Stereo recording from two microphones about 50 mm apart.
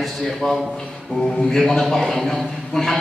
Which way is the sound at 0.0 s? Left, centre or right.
Centre.